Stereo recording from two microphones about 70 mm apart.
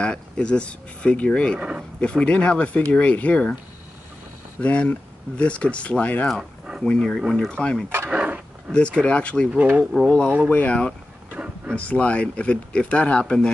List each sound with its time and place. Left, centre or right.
0.0 s speech: centre
1.6 s speech: centre
2.0 s speech: centre
4.6 s speech: centre
8.1 s a sound: centre
8.7 s speech: centre
9.6 s speech: right
9.9 s speech: centre
11.4 s a sound: right
11.7 s speech: centre